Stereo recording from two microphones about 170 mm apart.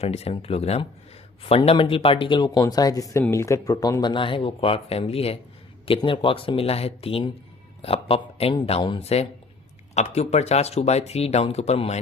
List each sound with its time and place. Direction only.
0.0 s speech: 35° left (ahead or behind)